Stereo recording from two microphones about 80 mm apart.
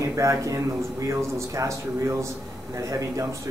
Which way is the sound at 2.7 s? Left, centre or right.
Right.